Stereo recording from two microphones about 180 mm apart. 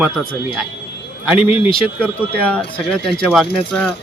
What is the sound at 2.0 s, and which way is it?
Speech, 10° left (ahead or behind).